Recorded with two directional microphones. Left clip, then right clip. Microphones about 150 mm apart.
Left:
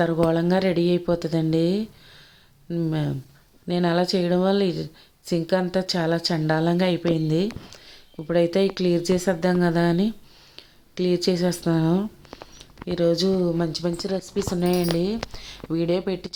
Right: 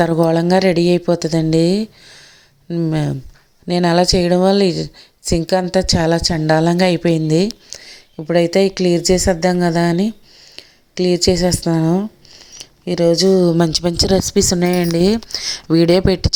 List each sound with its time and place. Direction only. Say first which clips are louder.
0.0 s a woman's voice: right 7 dB; 45° right (ahead or behind)
13.4 s speech: right 9 dB; 70° right (ahead or behind)